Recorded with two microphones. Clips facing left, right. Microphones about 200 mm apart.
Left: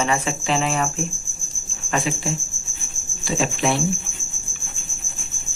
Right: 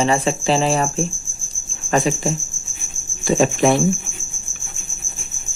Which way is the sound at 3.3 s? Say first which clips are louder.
Right 7 dB; 45° right (ahead or behind).